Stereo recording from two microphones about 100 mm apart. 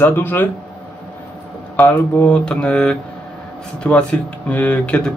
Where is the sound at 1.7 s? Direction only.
15° left (ahead or behind).